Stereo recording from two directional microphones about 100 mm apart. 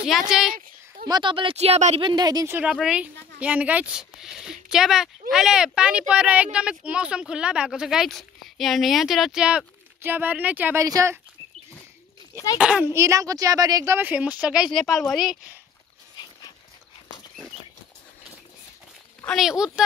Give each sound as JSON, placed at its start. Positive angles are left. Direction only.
{"t": 0.0, "sound": "a woman's voice", "side_deg": -5}
{"t": 1.0, "sound": "a woman's voice", "side_deg": -45}
{"t": 1.3, "sound": "a woman's voice", "side_deg": -60}
{"t": 2.0, "sound": "speech", "side_deg": -45}
{"t": 2.4, "sound": "speech", "side_deg": -15}
{"t": 10.0, "sound": "speech", "side_deg": -20}
{"t": 10.8, "sound": "a woman's voice", "side_deg": -35}
{"t": 12.5, "sound": "speech", "side_deg": -10}
{"t": 12.8, "sound": "a woman's voice", "side_deg": -30}
{"t": 13.9, "sound": "speech", "side_deg": -15}
{"t": 19.3, "sound": "speech", "side_deg": -5}